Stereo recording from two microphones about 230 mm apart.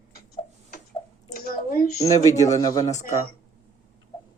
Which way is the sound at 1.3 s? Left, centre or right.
Left.